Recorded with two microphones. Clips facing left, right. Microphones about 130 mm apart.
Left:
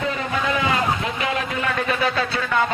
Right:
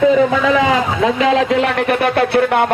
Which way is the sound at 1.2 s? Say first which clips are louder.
Right 11 dB; 90° right.